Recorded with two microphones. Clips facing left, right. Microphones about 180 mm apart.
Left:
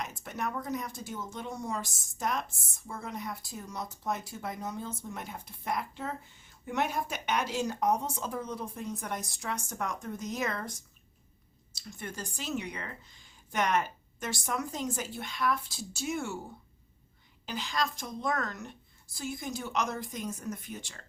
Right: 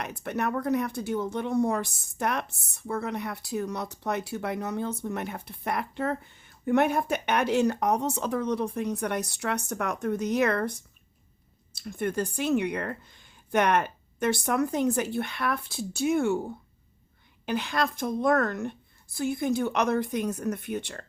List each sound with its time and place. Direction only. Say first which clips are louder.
0.0 s speech: right 6 dB; 65° right (ahead or behind)
17.4 s speech: right 6 dB; 60° right (ahead or behind)